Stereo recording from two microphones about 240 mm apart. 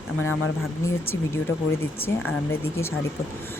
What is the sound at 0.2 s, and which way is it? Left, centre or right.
Speech, left.